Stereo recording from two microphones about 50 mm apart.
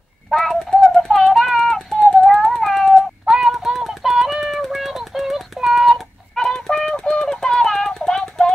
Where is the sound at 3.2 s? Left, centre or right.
Centre.